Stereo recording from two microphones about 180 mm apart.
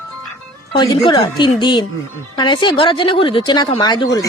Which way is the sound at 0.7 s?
25° left (ahead or behind).